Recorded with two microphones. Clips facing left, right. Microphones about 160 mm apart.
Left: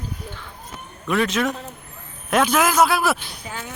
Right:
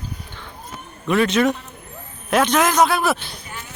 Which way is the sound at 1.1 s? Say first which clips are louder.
Right 4 dB; centre (ahead or behind).